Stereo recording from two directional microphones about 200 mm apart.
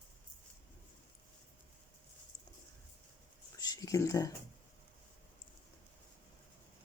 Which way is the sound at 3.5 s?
20° left (ahead or behind).